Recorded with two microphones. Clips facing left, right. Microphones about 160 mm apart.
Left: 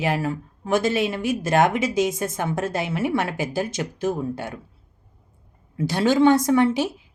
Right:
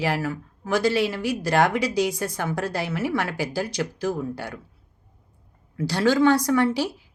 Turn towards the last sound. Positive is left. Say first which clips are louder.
# left 2 dB
turn(degrees=20)  # may be behind; listen again after turning